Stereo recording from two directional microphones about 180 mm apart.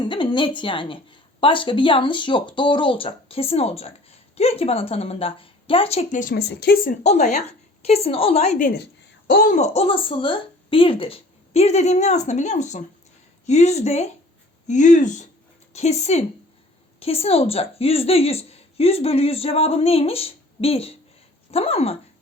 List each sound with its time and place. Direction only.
0.0 s a woman's voice: 25° left (ahead or behind); by 6.3 s 45° left (ahead or behind)
6.3 s speech: 65° left (ahead or behind)
7.0 s a woman's voice: 40° left (ahead or behind)